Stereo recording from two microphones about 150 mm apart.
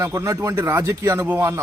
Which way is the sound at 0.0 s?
20° right (ahead or behind).